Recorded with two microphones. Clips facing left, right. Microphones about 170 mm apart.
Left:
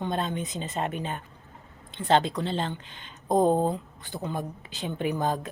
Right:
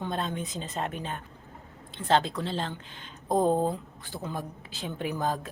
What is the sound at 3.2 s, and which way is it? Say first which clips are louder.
Speech: left 3 dB; 20° left (ahead or behind).